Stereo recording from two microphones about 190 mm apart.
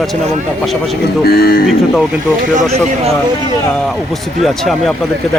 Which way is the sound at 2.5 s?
35° right (ahead or behind).